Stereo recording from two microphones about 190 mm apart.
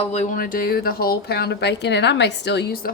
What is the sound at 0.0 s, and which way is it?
A woman's voice, 35° left (ahead or behind).